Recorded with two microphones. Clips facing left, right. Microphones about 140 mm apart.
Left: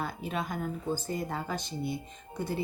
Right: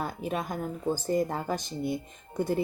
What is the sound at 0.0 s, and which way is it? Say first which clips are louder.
Speech: right 2 dB; 45° right (ahead or behind).